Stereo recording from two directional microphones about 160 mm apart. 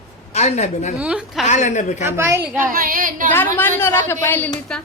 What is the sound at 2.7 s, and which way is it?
Speech, 65° right (ahead or behind).